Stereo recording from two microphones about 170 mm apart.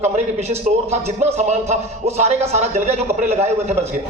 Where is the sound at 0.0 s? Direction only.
40° right (ahead or behind).